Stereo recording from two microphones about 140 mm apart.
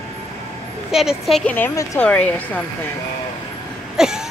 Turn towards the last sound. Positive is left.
turn(degrees=-5)  # may be behind; listen again after turning